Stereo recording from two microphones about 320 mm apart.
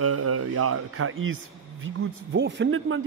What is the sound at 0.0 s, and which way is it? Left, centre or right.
Speech, right.